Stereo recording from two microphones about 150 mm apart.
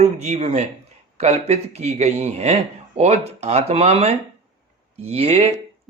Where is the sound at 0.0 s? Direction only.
45° right (ahead or behind).